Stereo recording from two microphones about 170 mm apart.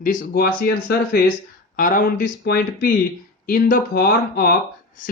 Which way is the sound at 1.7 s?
50° left (ahead or behind).